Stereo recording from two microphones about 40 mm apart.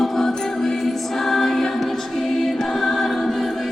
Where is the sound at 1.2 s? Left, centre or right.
Centre.